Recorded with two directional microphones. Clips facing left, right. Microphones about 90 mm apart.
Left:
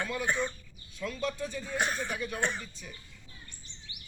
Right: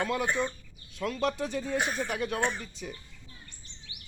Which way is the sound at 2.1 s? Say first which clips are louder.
Right 4 dB; 75° right (ahead or behind).